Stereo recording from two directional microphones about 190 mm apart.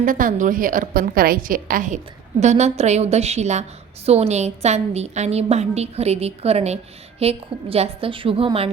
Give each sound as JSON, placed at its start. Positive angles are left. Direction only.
{"t": 0.0, "sound": "a woman's voice", "side_deg": -45}